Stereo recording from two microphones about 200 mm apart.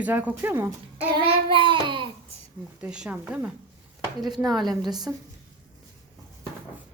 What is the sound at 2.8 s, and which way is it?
Speech, 5° right (ahead or behind).